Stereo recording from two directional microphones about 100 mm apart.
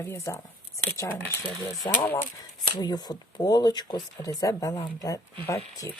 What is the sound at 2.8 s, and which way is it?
Speech, 40° left (ahead or behind).